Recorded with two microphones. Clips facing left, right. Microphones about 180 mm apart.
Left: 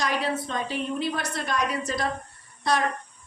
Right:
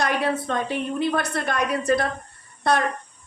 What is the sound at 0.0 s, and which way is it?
A woman's voice, 60° right (ahead or behind).